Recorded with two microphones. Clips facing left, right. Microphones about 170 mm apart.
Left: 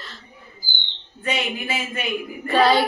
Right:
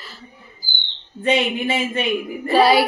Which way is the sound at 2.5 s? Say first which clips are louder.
Right 3 dB; 10° right (ahead or behind).